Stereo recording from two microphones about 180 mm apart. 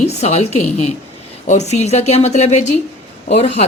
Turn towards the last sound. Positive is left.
turn(degrees=40)  # may be behind; listen again after turning